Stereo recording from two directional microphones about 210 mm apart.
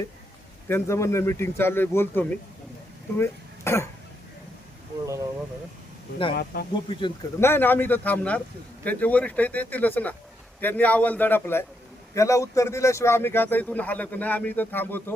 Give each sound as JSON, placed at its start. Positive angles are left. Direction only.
{"t": 0.7, "sound": "speech", "side_deg": 15}
{"t": 6.3, "sound": "speech", "side_deg": 45}
{"t": 6.7, "sound": "speech", "side_deg": 20}
{"t": 7.4, "sound": "speech", "side_deg": 10}